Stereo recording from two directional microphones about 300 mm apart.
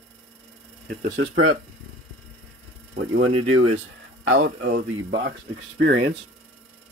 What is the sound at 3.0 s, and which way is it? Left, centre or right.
Speech, right.